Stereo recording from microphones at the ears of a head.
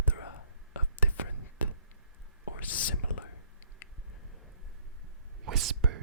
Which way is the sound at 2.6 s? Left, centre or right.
Left.